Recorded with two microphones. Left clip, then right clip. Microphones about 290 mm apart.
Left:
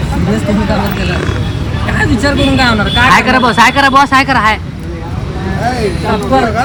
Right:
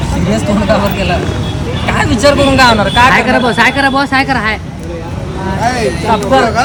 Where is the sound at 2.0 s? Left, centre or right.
Centre.